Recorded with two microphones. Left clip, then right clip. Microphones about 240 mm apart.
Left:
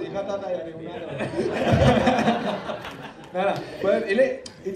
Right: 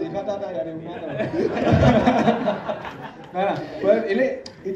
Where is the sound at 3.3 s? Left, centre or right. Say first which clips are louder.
Right 1 dB; left.